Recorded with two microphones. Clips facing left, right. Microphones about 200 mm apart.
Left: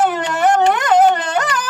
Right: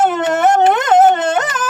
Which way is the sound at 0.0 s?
25° right (ahead or behind).